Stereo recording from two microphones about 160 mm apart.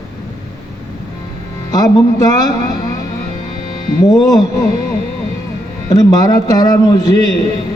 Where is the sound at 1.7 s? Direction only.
25° left (ahead or behind).